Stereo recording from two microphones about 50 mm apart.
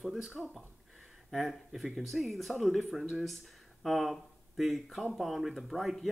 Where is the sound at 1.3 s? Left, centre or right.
Centre.